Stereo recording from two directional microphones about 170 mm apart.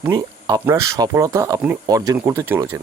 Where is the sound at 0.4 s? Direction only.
15° right (ahead or behind).